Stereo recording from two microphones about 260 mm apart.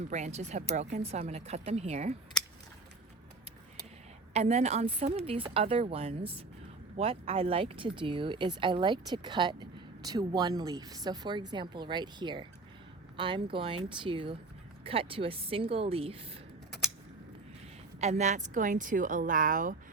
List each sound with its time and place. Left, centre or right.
0.1 s a woman's voice: right
4.4 s a woman's voice: right
18.0 s speech: right